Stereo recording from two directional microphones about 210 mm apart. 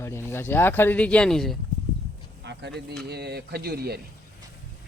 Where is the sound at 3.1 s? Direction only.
50° right (ahead or behind).